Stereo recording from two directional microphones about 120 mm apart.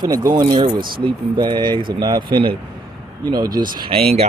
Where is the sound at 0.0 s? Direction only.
30° right (ahead or behind).